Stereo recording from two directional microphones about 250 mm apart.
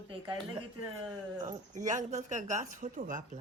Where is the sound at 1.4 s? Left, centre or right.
Right.